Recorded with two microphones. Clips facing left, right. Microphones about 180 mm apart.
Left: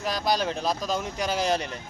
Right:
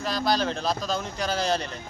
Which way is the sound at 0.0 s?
15° left (ahead or behind).